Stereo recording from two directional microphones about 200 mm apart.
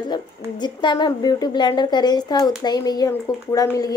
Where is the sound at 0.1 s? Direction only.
20° left (ahead or behind).